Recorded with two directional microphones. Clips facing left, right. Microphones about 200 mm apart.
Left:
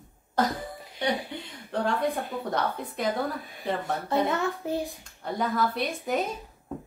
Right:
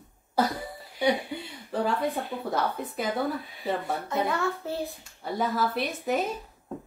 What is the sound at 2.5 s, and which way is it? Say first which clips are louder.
A woman's voice: right 1 dB; 5° right (ahead or behind).